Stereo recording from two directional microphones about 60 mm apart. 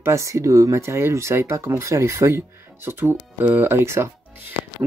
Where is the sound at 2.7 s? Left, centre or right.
Right.